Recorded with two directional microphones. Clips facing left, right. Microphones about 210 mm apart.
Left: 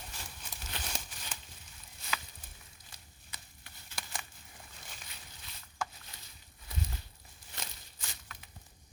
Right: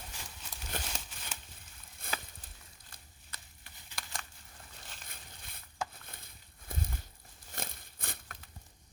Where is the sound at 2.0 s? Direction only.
50° right (ahead or behind).